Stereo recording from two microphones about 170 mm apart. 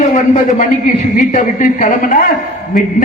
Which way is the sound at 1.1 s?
50° left (ahead or behind).